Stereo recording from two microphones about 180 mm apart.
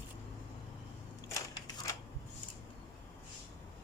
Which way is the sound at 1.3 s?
20° left (ahead or behind).